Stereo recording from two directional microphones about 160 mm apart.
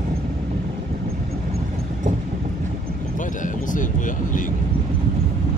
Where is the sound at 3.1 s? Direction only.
55° left (ahead or behind).